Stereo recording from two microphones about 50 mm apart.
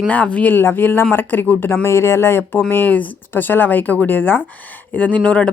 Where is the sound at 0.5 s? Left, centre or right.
Left.